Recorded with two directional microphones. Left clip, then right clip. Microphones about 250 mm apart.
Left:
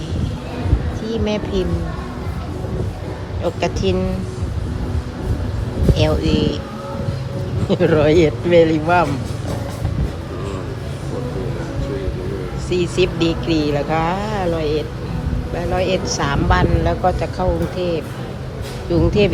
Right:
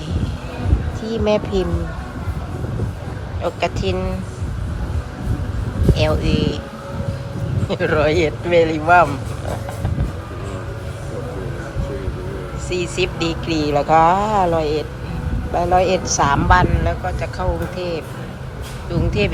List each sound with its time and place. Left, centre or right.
1.0 s speech: centre
3.4 s speech: centre
5.9 s speech: centre
7.7 s speech: centre
12.7 s speech: centre